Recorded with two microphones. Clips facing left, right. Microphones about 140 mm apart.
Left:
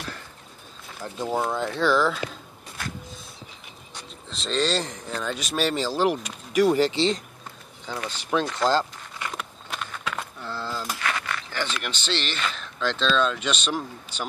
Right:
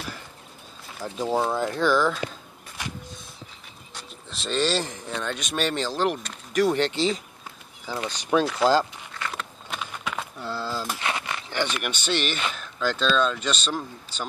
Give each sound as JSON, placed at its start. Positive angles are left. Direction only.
{"t": 1.2, "sound": "speech", "side_deg": -5}
{"t": 4.3, "sound": "speech", "side_deg": 0}
{"t": 8.0, "sound": "speech", "side_deg": -15}
{"t": 9.4, "sound": "a sound", "side_deg": 0}
{"t": 9.8, "sound": "keys jangling", "side_deg": -10}
{"t": 11.0, "sound": "a sound", "side_deg": -20}
{"t": 12.5, "sound": "speech", "side_deg": -5}